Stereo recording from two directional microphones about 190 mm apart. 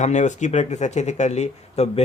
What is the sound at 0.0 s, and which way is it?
Speech, 40° left (ahead or behind).